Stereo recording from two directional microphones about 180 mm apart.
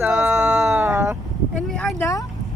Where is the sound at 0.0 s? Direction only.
10° right (ahead or behind).